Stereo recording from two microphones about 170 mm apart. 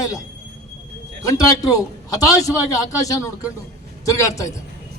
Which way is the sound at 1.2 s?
20° left (ahead or behind).